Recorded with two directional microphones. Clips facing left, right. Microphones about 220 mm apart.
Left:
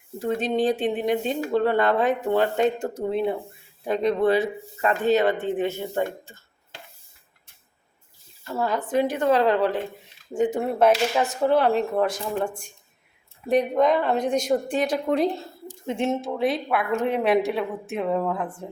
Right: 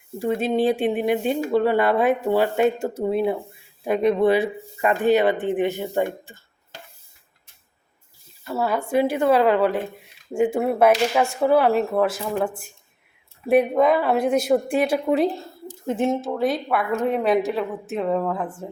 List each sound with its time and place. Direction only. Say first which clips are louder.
0.2 s speech: right 2 dB; 10° right (ahead or behind)
8.4 s speech: right 2 dB; 10° right (ahead or behind)